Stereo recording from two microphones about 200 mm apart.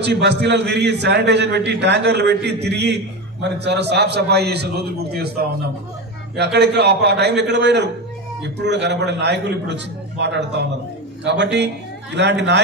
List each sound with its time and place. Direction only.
0.0 s a man's voice: 60° right (ahead or behind)